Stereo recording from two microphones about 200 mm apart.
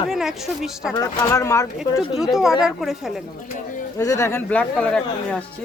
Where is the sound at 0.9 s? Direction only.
15° left (ahead or behind).